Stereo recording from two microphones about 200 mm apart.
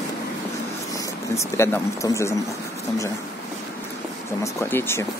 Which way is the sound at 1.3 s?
15° left (ahead or behind).